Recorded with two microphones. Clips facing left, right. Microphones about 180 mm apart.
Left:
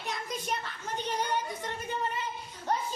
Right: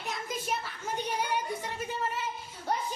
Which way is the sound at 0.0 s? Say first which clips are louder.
Even; centre (ahead or behind).